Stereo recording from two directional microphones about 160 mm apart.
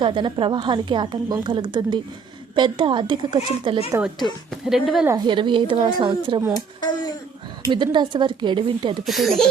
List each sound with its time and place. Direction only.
0.0 s a woman's voice: 30° right (ahead or behind)
4.2 s a woman's voice: centre (ahead or behind)
5.0 s a woman's voice: 25° right (ahead or behind)
6.8 s speech: 25° left (ahead or behind)
7.7 s a woman's voice: 30° right (ahead or behind)
9.0 s a woman's voice: centre (ahead or behind)